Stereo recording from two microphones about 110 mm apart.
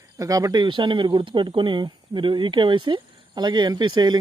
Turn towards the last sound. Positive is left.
turn(degrees=-40)  # may be behind; listen again after turning